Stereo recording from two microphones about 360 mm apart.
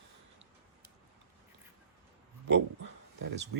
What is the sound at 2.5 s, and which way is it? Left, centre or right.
Speech, right.